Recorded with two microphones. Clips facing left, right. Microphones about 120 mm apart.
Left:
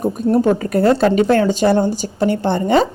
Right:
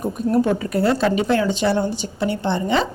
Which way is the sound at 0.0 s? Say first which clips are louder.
Left 4 dB; 40° left (ahead or behind).